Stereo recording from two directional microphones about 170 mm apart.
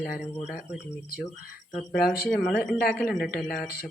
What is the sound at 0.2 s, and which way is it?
Speech, centre (ahead or behind).